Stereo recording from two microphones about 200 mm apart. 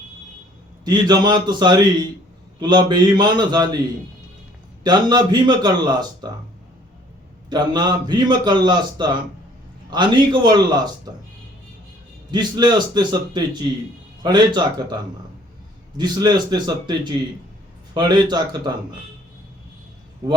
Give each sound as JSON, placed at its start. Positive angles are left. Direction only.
{"t": 0.9, "sound": "speech", "side_deg": -20}
{"t": 4.8, "sound": "speech", "side_deg": -20}
{"t": 7.5, "sound": "speech", "side_deg": -20}
{"t": 12.3, "sound": "speech", "side_deg": -20}
{"t": 16.0, "sound": "speech", "side_deg": -20}